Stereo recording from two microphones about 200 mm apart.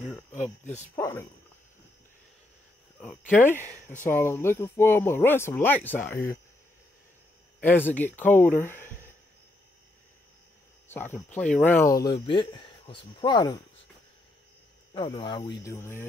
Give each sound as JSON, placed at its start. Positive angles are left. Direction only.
{"t": 0.9, "sound": "speech", "side_deg": 15}
{"t": 3.0, "sound": "speech", "side_deg": 5}
{"t": 7.6, "sound": "speech", "side_deg": 10}
{"t": 10.9, "sound": "speech", "side_deg": 10}
{"t": 15.0, "sound": "speech", "side_deg": 25}